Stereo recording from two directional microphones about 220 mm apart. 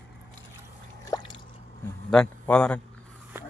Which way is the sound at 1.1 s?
20° left (ahead or behind).